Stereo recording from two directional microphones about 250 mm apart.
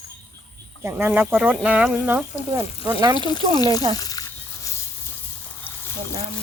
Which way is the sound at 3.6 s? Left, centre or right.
Centre.